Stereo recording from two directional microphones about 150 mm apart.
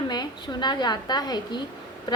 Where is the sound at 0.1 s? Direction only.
30° left (ahead or behind).